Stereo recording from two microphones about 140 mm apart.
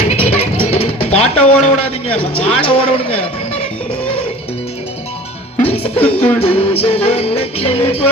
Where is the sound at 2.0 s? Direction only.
10° left (ahead or behind).